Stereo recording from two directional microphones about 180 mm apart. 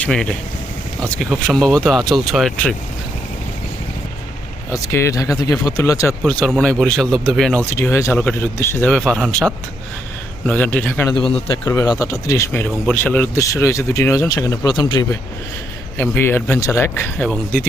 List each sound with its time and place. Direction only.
0.0 s speech: 5° left (ahead or behind)
4.7 s speech: 15° left (ahead or behind)
6.2 s speech: 5° left (ahead or behind)
7.7 s speech: 15° left (ahead or behind)
11.1 s a man's voice: 30° left (ahead or behind)
11.6 s speech: 20° left (ahead or behind)
16.0 s speech: 10° left (ahead or behind)